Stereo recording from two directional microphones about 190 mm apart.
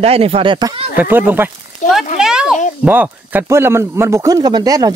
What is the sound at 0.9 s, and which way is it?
A child's voice, 10° right (ahead or behind).